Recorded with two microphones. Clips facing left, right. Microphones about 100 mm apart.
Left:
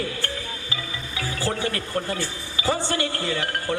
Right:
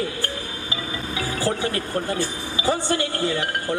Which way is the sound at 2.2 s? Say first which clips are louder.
Right 4 dB; 20° right (ahead or behind).